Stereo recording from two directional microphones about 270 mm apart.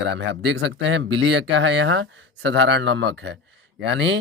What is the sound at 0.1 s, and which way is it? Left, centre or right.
Speech, right.